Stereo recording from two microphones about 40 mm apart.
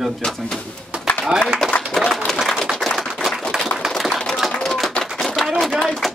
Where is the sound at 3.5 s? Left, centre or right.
Centre.